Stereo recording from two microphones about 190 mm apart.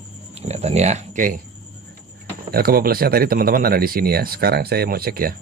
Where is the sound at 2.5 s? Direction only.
50° right (ahead or behind).